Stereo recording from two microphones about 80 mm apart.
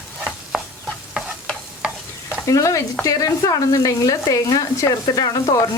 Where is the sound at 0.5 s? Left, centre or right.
Centre.